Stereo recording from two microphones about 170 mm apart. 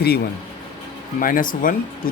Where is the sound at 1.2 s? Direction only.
55° left (ahead or behind).